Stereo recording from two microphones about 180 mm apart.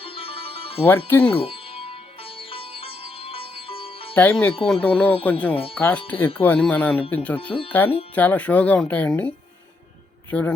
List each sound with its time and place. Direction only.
0.0 s music: 30° left (ahead or behind)
0.9 s speech: 10° left (ahead or behind)
1.3 s sitar: 30° left (ahead or behind)
4.1 s speech: 10° left (ahead or behind)